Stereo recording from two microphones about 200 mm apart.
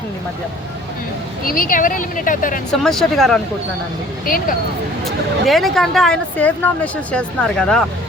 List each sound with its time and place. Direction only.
1.5 s speech: 45° left (ahead or behind)
2.8 s speech: centre (ahead or behind)
5.0 s speech: centre (ahead or behind)